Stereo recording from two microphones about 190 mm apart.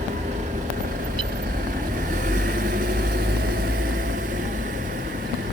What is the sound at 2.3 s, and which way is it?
Vehicle, 50° right (ahead or behind).